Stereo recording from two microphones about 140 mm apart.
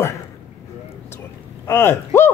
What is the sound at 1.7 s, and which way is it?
Speech, 15° left (ahead or behind).